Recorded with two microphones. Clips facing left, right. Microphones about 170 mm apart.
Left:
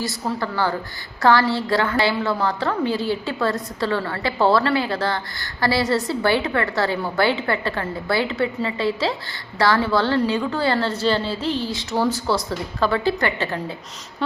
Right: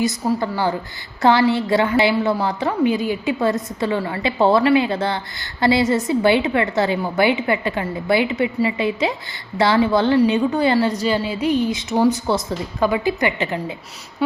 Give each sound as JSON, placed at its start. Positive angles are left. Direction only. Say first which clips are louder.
{"t": 0.0, "sound": "a woman's voice", "louder": "right 5 dB", "side_deg": -20}